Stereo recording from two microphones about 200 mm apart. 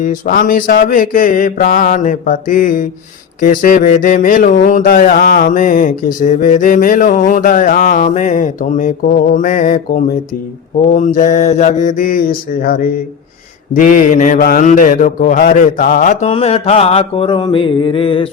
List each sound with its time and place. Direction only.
0.0 s mantra: 40° left (ahead or behind); by 18.3 s 25° left (ahead or behind)